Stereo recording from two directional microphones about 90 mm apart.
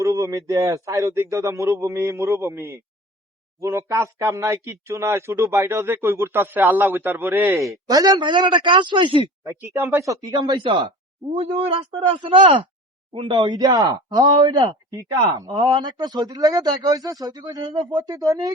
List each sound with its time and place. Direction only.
0.0 s a man's voice: 35° right (ahead or behind)
7.5 s a man's voice: 40° right (ahead or behind); by 9.3 s 60° right (ahead or behind)
10.0 s a man's voice: 40° right (ahead or behind)
10.3 s a man's voice: 50° right (ahead or behind)
10.6 s a man's voice: 60° right (ahead or behind)
11.3 s speech: 75° right (ahead or behind)
13.1 s a man's voice: 60° right (ahead or behind); by 18.5 s 40° right (ahead or behind)